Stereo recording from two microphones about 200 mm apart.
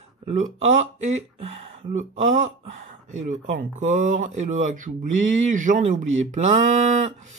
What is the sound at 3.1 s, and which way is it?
Speech, 40° right (ahead or behind).